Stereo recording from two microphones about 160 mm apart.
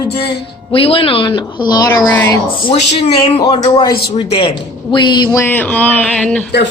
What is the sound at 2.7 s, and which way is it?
A woman's voice, 35° left (ahead or behind).